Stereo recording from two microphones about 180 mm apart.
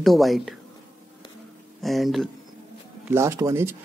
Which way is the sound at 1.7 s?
Centre (ahead or behind).